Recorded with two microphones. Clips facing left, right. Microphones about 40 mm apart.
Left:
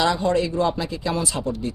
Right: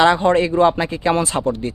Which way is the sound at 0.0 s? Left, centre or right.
Right.